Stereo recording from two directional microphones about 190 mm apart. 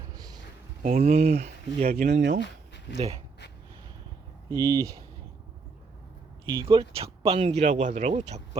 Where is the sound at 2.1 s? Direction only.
65° right (ahead or behind).